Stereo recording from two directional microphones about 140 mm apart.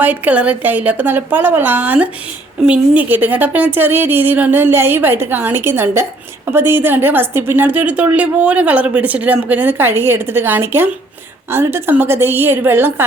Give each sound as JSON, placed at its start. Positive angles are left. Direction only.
{"t": 0.0, "sound": "a woman's voice", "side_deg": -10}